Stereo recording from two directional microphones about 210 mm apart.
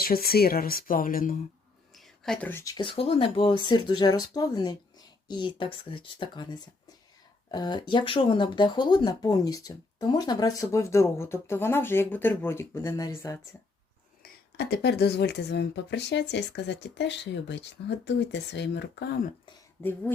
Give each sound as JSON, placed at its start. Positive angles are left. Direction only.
{"t": 0.0, "sound": "speech", "side_deg": 45}
{"t": 2.0, "sound": "speech", "side_deg": 5}
{"t": 14.2, "sound": "speech", "side_deg": 50}
{"t": 19.8, "sound": "speech", "side_deg": 10}